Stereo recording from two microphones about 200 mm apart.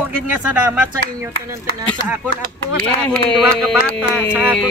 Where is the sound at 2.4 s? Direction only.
45° right (ahead or behind).